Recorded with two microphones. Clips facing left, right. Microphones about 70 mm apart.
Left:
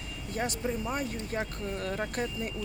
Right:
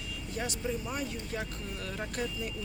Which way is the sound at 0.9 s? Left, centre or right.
Left.